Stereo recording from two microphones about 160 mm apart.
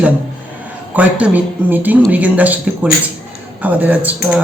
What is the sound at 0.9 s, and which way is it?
Speech, 10° right (ahead or behind).